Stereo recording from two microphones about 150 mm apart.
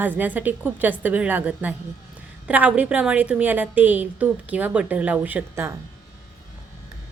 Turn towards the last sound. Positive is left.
turn(degrees=-15)  # may be behind; listen again after turning